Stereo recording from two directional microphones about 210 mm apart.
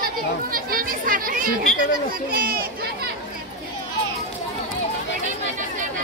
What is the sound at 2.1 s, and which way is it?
Speech, 45° right (ahead or behind).